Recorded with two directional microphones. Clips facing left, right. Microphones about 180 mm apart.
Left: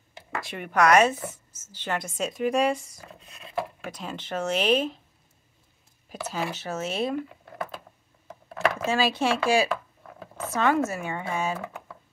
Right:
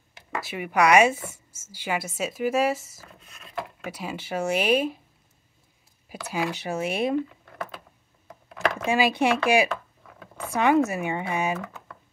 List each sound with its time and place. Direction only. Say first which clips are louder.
0.4 s a woman's voice: right 1 dB; 5° right (ahead or behind)
6.1 s a woman's voice: right 2 dB; 10° right (ahead or behind)
8.3 s a sound: left 1 dB; centre (ahead or behind)
8.8 s a woman's voice: right 4 dB; 15° right (ahead or behind)
9.7 s a sound: left 2 dB; 5° left (ahead or behind)
10.4 s a woman's voice: right 3 dB; 15° right (ahead or behind)